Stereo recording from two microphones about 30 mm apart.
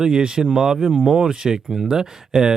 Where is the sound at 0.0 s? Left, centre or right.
Right.